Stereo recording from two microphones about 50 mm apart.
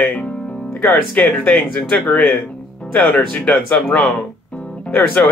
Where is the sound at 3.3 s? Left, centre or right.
Left.